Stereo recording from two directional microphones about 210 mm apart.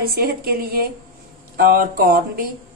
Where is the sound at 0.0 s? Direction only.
45° right (ahead or behind).